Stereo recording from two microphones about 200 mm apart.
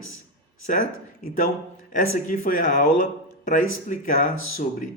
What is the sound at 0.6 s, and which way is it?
Speech, 40° left (ahead or behind).